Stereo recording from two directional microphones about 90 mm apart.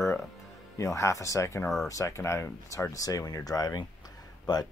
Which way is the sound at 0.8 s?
35° left (ahead or behind).